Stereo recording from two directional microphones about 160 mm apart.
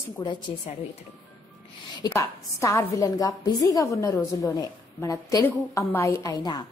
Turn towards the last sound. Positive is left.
turn(degrees=20)  # may be behind; listen again after turning